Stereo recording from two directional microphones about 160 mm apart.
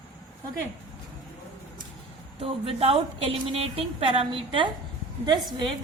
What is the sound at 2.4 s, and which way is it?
A woman's voice, 35° right (ahead or behind).